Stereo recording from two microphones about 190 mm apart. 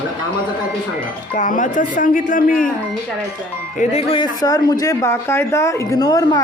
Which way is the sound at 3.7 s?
30° left (ahead or behind).